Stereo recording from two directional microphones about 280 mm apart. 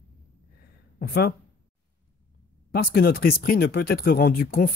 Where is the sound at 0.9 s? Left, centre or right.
Left.